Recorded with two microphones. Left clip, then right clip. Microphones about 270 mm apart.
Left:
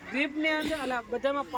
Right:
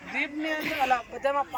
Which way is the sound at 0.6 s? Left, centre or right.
Centre.